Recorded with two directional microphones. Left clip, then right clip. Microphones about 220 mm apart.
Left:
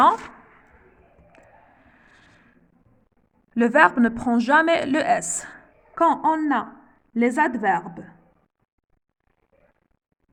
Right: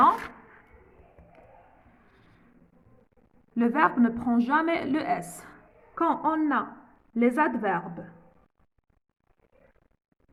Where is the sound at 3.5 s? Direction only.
50° left (ahead or behind).